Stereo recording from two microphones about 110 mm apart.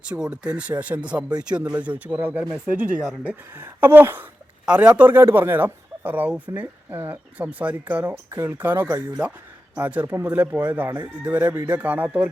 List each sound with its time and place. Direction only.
0.0 s speech: 10° right (ahead or behind)
8.0 s speech: 25° right (ahead or behind)